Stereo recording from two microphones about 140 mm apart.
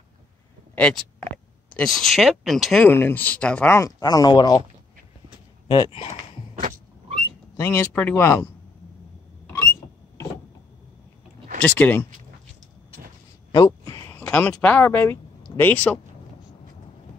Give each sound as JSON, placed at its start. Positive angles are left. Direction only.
{"t": 0.7, "sound": "speech", "side_deg": 10}
{"t": 2.9, "sound": "speech", "side_deg": 15}
{"t": 5.7, "sound": "speech", "side_deg": 40}
{"t": 7.5, "sound": "speech", "side_deg": 20}
{"t": 9.5, "sound": "a sound", "side_deg": 20}
{"t": 11.6, "sound": "speech", "side_deg": 10}
{"t": 13.5, "sound": "a sound", "side_deg": 25}
{"t": 14.1, "sound": "speech", "side_deg": 15}